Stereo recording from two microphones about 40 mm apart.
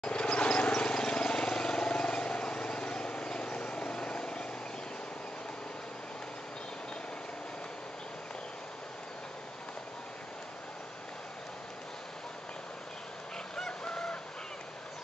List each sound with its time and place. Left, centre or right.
0.0 s vehicle: left
13.6 s chicken: centre